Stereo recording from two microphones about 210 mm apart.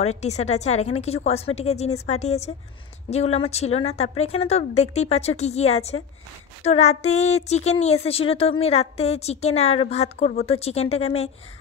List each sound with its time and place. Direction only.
0.0 s a woman's voice: 30° left (ahead or behind)